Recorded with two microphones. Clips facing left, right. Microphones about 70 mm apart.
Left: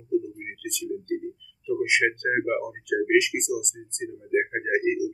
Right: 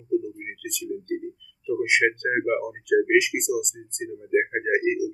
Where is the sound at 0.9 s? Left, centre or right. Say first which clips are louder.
Even; centre.